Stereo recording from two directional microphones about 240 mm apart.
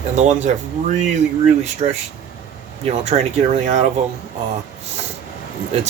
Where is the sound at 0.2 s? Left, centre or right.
Right.